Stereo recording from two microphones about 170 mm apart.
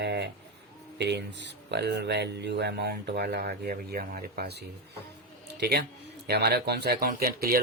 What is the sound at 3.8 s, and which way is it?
A man's voice, 60° right (ahead or behind).